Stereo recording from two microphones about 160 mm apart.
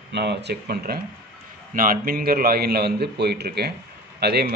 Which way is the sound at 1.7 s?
60° right (ahead or behind).